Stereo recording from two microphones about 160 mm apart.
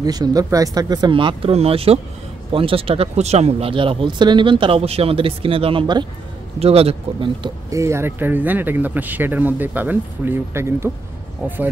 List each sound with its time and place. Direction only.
0.0 s speech: 25° right (ahead or behind)
7.7 s speech: 15° right (ahead or behind)